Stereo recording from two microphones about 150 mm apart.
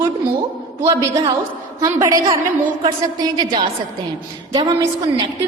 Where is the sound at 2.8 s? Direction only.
30° right (ahead or behind).